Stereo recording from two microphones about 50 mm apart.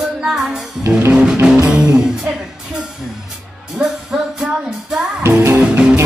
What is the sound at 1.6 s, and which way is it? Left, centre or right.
Music, centre.